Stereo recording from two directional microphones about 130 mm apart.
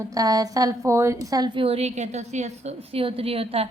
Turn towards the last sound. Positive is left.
turn(degrees=-50)  # may be behind; listen again after turning